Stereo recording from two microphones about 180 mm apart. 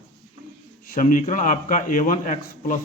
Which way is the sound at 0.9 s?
45° left (ahead or behind).